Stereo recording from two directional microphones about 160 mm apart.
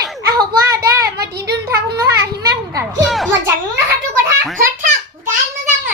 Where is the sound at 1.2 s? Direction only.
90° right.